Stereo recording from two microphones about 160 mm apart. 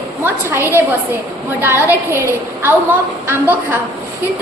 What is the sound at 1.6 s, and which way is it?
Speech, 15° right (ahead or behind).